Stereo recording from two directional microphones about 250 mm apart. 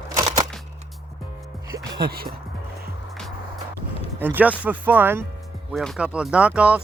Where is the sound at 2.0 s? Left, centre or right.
Right.